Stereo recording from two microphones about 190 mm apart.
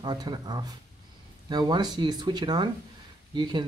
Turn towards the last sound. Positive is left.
turn(degrees=-25)  # may be behind; listen again after turning